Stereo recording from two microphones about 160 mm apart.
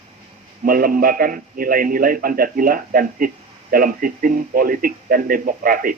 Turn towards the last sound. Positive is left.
turn(degrees=-60)  # may be behind; listen again after turning